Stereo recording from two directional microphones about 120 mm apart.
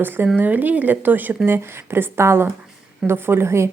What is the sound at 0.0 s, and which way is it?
A woman's voice, 15° right (ahead or behind).